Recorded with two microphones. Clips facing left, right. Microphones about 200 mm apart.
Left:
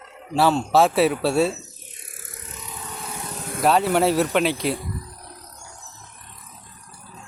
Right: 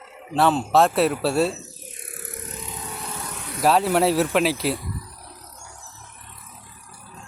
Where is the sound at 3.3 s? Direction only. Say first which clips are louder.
Left 3 dB; 45° left (ahead or behind).